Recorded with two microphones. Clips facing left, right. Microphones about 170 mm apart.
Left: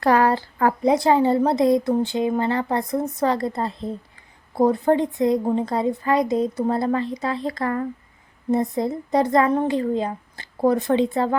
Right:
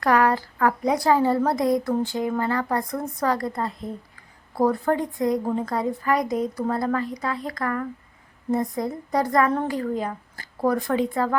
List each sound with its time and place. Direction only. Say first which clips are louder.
0.0 s speech: left 2 dB; 30° left (ahead or behind)